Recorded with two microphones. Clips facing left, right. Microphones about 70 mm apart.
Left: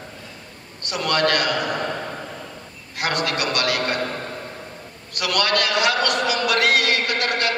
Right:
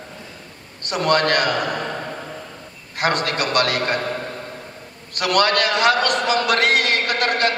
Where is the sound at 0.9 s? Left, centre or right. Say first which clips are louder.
Right 3 dB; right.